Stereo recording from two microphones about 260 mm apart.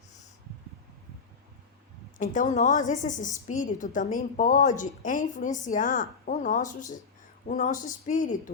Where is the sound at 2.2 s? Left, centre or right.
Left.